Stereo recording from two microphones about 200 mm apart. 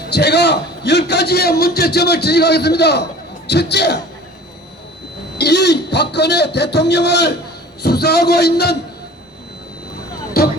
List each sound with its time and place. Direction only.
0.1 s a man's voice: 55° left (ahead or behind)
5.4 s a man's voice: 55° left (ahead or behind)